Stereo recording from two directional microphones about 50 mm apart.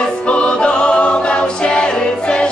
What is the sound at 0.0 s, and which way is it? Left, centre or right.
Music, left.